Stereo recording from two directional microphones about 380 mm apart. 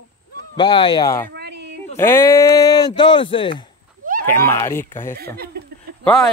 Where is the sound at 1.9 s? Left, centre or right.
Centre.